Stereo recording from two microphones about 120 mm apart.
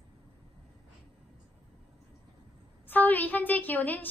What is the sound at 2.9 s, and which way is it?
A woman's voice, 15° left (ahead or behind).